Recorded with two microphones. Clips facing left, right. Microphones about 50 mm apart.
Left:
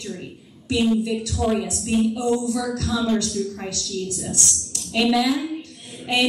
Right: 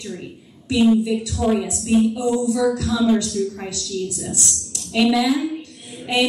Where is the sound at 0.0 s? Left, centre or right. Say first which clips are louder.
Right 1 dB; centre.